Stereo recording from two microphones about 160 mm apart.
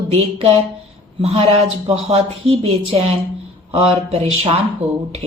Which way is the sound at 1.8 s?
40° right (ahead or behind).